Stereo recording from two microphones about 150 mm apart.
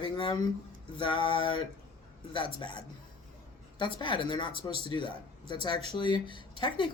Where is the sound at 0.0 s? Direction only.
35° left (ahead or behind).